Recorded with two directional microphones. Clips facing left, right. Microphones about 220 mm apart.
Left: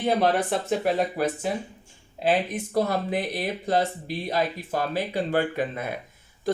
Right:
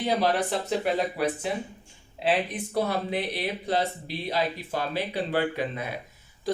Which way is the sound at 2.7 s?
45° left (ahead or behind).